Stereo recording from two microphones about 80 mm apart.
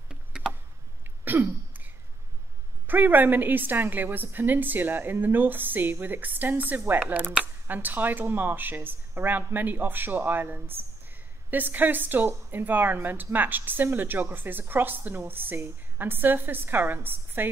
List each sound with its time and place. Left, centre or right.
0.1 s tick: centre
1.2 s throat clearing: right
2.9 s speech: right